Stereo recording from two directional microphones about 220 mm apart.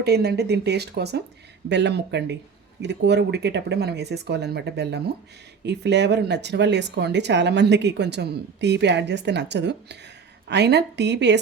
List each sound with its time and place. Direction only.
0.0 s speech: 45° right (ahead or behind)